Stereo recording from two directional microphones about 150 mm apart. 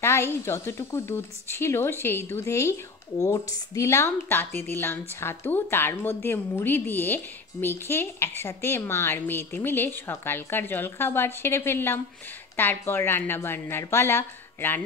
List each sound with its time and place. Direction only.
0.0 s a woman's voice: 15° left (ahead or behind)